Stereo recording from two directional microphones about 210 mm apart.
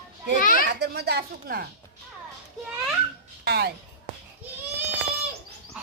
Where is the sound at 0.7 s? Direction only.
50° right (ahead or behind).